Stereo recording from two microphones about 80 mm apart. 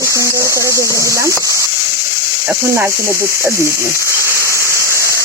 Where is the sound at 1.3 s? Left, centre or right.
Left.